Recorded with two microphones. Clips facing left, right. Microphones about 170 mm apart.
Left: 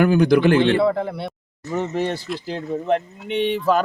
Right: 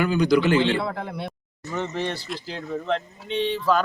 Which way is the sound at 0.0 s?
50° left (ahead or behind).